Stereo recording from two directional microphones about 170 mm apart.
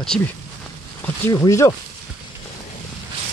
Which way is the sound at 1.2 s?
20° left (ahead or behind).